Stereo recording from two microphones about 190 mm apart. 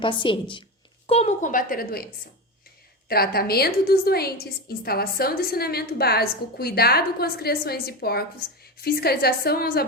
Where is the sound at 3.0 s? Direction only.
55° left (ahead or behind).